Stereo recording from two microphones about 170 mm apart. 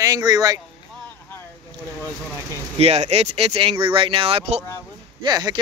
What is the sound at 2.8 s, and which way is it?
Speech, 40° right (ahead or behind).